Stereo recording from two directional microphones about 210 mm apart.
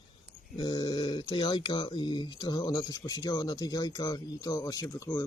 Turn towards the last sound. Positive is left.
turn(degrees=15)  # may be behind; listen again after turning